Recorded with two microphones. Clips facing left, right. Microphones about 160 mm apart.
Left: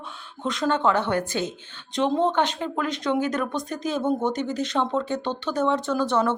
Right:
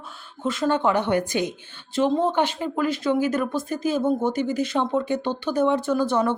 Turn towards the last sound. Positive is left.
turn(degrees=-10)  # may be behind; listen again after turning